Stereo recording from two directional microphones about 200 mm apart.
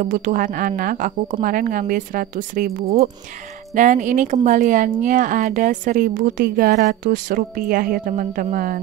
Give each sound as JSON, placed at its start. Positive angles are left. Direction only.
{"t": 0.0, "sound": "speech", "side_deg": -40}